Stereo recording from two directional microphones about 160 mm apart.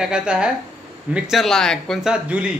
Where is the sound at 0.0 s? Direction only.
5° right (ahead or behind).